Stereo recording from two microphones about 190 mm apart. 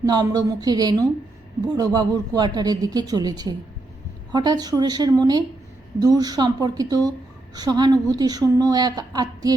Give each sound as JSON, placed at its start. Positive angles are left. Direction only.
{"t": 0.0, "sound": "a woman's voice", "side_deg": -20}